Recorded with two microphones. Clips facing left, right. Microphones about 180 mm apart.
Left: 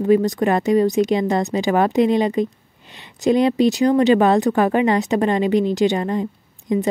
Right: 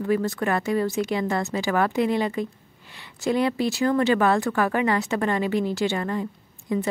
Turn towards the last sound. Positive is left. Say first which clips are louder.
# left 5 dB
turn(degrees=20)  # may be behind; listen again after turning